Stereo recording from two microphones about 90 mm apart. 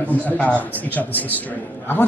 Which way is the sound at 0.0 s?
15° left (ahead or behind).